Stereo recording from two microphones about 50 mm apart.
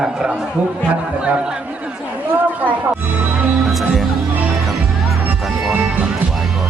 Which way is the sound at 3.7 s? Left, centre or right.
Centre.